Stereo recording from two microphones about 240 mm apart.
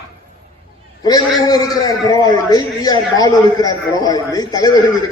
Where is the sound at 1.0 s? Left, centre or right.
Centre.